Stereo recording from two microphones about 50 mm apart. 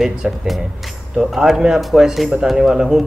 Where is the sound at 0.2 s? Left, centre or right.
Centre.